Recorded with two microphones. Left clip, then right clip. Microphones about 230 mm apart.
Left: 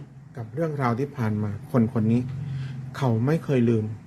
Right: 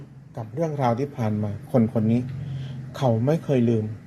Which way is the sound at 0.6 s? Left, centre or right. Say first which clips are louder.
Right 2 dB; centre.